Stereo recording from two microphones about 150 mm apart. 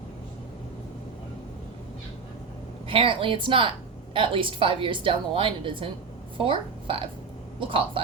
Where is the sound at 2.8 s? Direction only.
35° right (ahead or behind).